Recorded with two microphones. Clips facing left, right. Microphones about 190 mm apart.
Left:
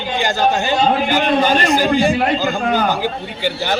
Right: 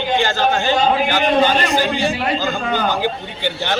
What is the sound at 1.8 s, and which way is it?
Speech, 50° left (ahead or behind).